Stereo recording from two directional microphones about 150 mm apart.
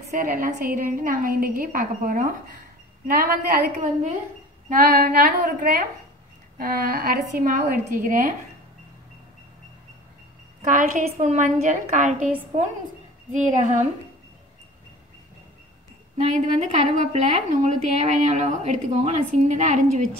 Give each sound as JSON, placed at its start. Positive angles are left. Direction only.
{"t": 0.2, "sound": "a woman's voice", "side_deg": -65}
{"t": 4.6, "sound": "a woman's voice", "side_deg": -70}
{"t": 6.6, "sound": "a woman's voice", "side_deg": -85}
{"t": 10.6, "sound": "a woman's voice", "side_deg": -55}
{"t": 16.3, "sound": "a woman's voice", "side_deg": -50}